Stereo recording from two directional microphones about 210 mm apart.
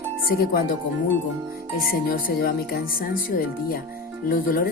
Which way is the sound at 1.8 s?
45° left (ahead or behind).